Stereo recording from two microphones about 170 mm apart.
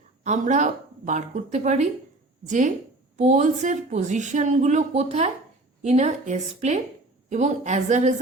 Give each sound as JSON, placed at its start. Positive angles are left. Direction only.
{"t": 0.3, "sound": "a woman's voice", "side_deg": -45}